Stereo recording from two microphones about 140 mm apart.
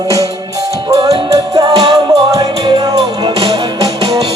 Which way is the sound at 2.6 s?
40° right (ahead or behind).